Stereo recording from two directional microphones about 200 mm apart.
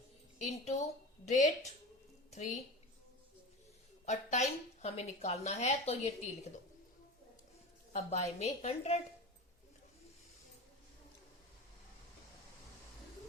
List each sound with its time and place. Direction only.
0.3 s a woman's voice: 35° left (ahead or behind)
4.0 s a woman's voice: 35° left (ahead or behind)
7.9 s a woman's voice: 35° left (ahead or behind)